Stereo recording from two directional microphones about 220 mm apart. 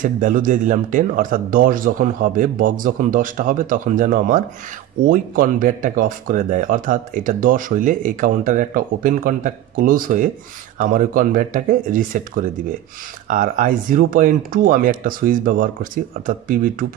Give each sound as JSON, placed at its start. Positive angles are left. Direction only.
{"t": 0.0, "sound": "speech", "side_deg": -35}